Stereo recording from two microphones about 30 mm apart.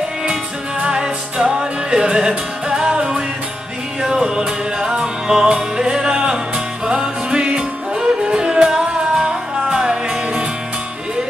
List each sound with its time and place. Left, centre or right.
0.9 s music: right
4.1 s music: right
8.5 s music: centre